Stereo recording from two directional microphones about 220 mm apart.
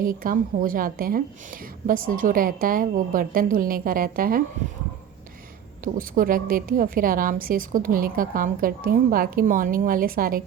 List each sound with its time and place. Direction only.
0.0 s a woman's voice: 40° right (ahead or behind)
5.8 s a woman's voice: 40° right (ahead or behind)